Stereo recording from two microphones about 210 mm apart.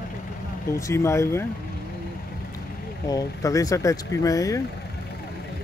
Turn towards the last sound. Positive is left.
turn(degrees=15)  # may be behind; listen again after turning